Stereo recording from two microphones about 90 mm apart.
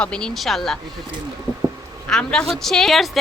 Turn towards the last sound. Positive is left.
turn(degrees=0)  # may be behind; listen again after turning